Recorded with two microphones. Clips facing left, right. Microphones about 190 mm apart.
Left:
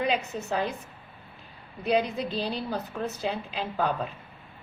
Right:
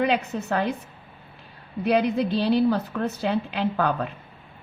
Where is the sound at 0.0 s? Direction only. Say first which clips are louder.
Right 4 dB; 60° right (ahead or behind).